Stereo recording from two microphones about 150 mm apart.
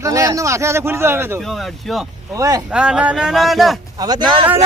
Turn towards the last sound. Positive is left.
turn(degrees=-30)  # may be behind; listen again after turning